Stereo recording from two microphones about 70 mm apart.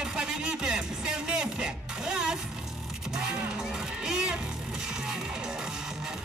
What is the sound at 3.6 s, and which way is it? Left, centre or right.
Music, centre.